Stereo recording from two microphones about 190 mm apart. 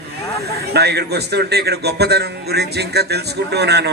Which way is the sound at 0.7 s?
60° right (ahead or behind).